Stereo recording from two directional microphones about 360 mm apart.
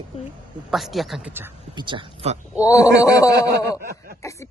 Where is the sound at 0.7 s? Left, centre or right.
Centre.